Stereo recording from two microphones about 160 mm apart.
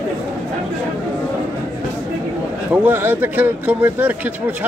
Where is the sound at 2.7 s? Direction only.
10° right (ahead or behind).